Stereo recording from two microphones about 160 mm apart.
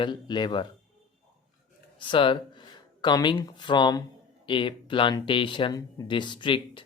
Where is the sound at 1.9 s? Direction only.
30° left (ahead or behind).